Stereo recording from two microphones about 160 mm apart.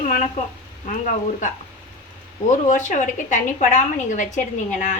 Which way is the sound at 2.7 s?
50° left (ahead or behind).